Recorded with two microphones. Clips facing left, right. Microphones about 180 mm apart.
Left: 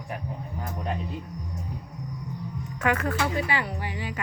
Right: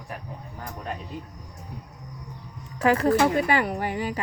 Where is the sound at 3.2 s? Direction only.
50° right (ahead or behind).